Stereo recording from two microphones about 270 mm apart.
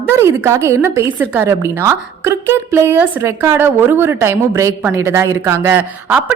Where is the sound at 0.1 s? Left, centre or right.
Centre.